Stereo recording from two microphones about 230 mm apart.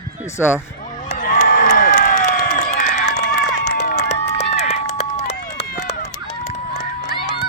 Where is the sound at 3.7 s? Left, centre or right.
Left.